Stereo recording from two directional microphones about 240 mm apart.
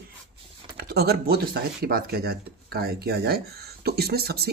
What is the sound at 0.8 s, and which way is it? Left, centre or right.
Speech, right.